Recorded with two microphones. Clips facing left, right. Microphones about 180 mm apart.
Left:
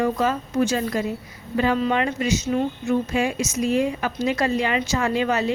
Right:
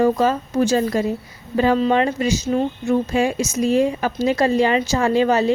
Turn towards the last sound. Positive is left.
turn(degrees=-35)  # may be behind; listen again after turning